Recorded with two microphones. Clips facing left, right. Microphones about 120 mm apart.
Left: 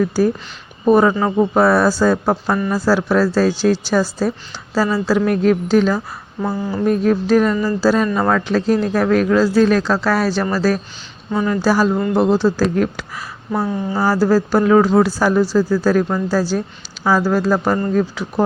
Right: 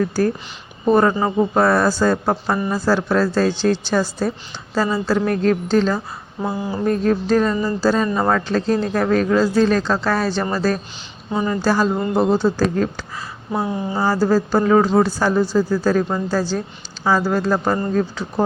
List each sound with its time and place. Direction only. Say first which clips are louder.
0.1 s speech: left 3 dB; 10° left (ahead or behind)
2.6 s speech: left 2 dB; 15° right (ahead or behind)
2.8 s speech: left 2 dB; 5° left (ahead or behind)
6.4 s speech: left 2 dB; 10° right (ahead or behind)
6.8 s speech: left 2 dB; 5° left (ahead or behind)
7.5 s speech: left 2 dB; 20° right (ahead or behind)
7.8 s speech: left 2 dB; 5° left (ahead or behind)
11.3 s speech: left 2 dB; 15° right (ahead or behind)
11.6 s speech: left 3 dB; 5° left (ahead or behind)
13.5 s speech: left 2 dB; 10° right (ahead or behind)
14.3 s speech: left 2 dB; 5° left (ahead or behind)